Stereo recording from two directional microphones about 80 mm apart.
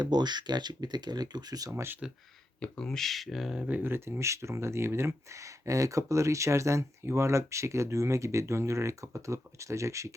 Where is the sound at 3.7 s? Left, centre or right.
Right.